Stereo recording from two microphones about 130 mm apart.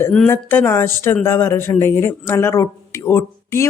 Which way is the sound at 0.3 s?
20° left (ahead or behind).